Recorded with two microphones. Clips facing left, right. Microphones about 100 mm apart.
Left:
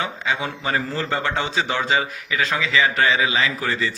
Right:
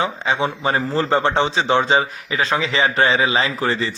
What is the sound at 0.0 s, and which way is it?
A man's voice, 30° right (ahead or behind).